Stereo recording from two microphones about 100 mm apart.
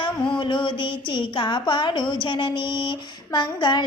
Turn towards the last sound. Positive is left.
turn(degrees=50)  # may be behind; listen again after turning